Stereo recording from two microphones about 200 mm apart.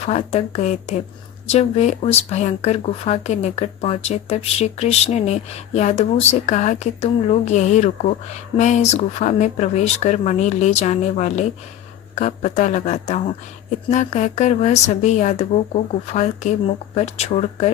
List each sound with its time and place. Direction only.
0.0 s speech: 35° left (ahead or behind)